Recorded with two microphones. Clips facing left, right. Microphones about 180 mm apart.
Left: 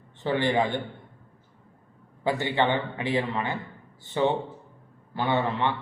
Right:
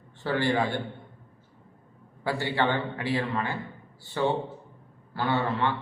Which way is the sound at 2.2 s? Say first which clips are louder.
Left 2 dB; 20° left (ahead or behind).